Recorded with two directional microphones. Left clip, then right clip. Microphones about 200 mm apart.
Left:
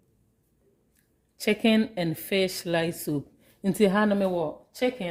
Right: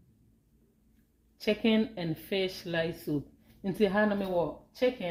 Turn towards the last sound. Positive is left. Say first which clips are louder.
# left 2 dB
turn(degrees=65)  # may be behind; listen again after turning